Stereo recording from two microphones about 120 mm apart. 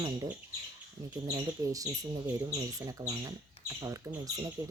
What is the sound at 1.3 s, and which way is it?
Speech, 30° right (ahead or behind).